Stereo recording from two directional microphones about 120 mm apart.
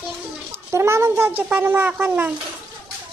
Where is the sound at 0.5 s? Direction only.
20° right (ahead or behind).